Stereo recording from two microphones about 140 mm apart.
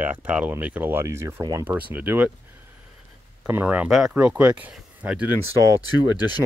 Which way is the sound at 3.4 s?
15° right (ahead or behind).